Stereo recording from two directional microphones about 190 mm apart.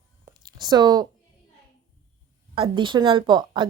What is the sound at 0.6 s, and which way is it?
Speech, 20° right (ahead or behind).